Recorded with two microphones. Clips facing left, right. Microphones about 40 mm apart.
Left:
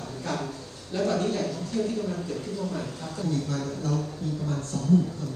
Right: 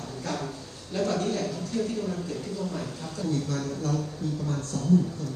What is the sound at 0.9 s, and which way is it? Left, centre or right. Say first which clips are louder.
Speech: left 1 dB; left.